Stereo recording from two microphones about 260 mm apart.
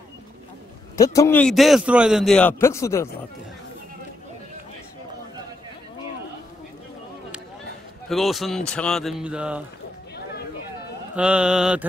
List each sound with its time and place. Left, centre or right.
0.9 s a man's voice: centre
8.1 s a man's voice: centre
11.1 s a man's voice: centre